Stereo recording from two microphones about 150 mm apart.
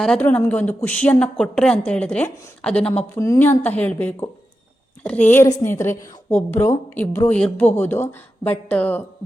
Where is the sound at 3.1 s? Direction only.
20° left (ahead or behind).